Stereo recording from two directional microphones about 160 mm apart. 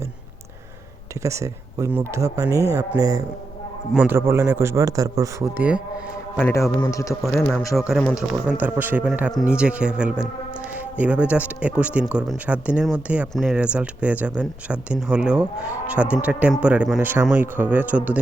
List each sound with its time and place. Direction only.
1.2 s speech: 20° right (ahead or behind)
6.4 s a man's voice: 15° left (ahead or behind)
7.2 s speech: centre (ahead or behind)